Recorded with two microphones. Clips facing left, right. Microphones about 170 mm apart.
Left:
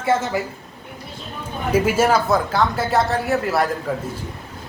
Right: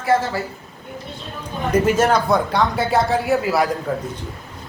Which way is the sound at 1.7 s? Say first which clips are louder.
Right 1 dB; 5° left (ahead or behind).